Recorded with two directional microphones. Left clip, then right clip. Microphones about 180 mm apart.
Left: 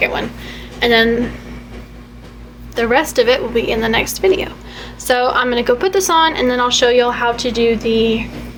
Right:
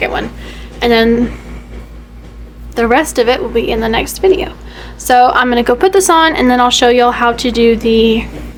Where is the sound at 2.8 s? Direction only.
40° right (ahead or behind).